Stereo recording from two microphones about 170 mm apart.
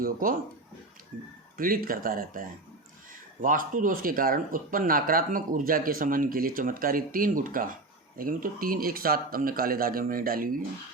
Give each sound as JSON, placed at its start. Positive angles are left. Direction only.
{"t": 0.0, "sound": "speech", "side_deg": -55}
{"t": 1.5, "sound": "speech", "side_deg": -55}